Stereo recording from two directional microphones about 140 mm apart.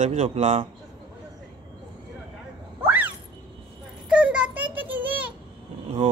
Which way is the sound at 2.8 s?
15° right (ahead or behind).